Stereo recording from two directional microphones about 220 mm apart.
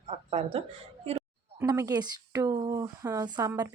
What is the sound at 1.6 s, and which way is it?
Speech, 15° right (ahead or behind).